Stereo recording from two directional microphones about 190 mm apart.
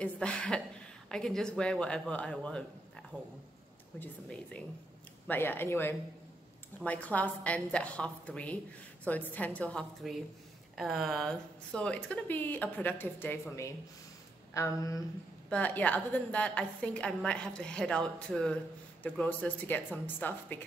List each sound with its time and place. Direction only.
0.0 s a woman's voice: 5° left (ahead or behind)